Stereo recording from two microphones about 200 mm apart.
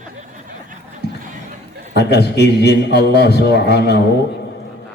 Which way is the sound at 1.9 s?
55° left (ahead or behind).